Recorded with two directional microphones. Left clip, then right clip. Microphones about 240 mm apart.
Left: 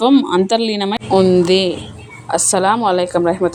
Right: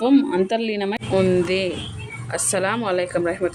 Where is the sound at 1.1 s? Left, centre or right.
Centre.